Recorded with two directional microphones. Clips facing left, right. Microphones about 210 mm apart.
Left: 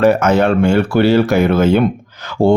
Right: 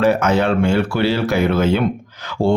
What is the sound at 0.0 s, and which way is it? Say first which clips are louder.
A man's voice: left 4 dB; 50° left (ahead or behind).